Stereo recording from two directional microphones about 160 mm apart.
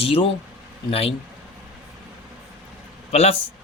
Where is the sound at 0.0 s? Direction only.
35° left (ahead or behind).